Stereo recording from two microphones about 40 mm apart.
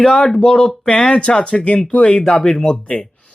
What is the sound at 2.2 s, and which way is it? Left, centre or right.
Speech, centre.